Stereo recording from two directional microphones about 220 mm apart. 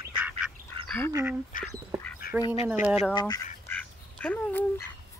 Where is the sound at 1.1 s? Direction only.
10° right (ahead or behind).